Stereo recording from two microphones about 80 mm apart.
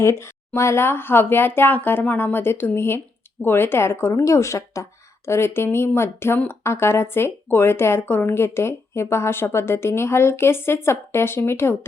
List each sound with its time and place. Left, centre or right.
0.0 s speech: left